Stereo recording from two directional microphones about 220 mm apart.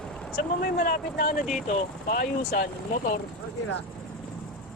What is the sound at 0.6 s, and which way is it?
Speech, 40° left (ahead or behind).